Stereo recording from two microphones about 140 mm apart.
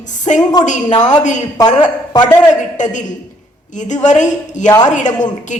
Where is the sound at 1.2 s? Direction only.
60° left (ahead or behind).